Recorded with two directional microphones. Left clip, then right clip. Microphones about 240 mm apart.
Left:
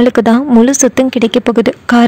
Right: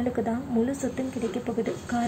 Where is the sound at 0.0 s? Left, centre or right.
Left.